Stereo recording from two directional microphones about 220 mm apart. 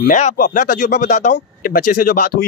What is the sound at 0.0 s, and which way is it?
Speech, 35° left (ahead or behind).